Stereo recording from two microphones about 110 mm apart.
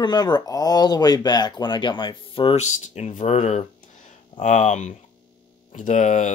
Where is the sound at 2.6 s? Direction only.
85° left.